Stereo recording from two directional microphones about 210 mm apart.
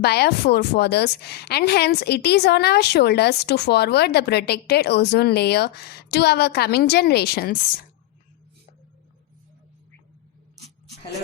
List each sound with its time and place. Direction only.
0.0 s a woman's voice: 50° left (ahead or behind)